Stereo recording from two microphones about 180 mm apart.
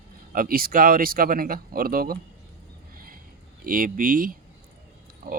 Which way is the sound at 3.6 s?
50° right (ahead or behind).